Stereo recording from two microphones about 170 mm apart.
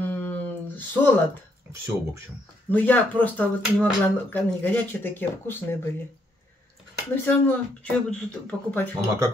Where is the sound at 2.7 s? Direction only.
10° left (ahead or behind).